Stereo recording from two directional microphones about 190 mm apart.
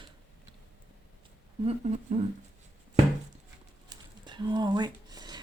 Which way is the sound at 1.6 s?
35° right (ahead or behind).